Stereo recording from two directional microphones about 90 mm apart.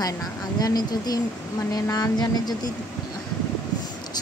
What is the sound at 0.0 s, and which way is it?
A woman's voice, 45° left (ahead or behind).